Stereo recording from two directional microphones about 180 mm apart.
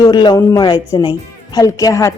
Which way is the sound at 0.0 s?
25° left (ahead or behind).